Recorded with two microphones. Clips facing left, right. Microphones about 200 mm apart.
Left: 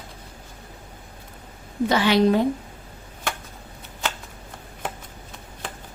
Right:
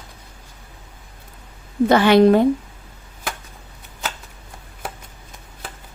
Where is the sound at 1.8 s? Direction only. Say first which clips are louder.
Right 6 dB; 55° right (ahead or behind).